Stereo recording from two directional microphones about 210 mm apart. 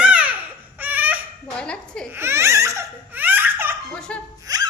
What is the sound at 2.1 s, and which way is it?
Laughter, 10° right (ahead or behind).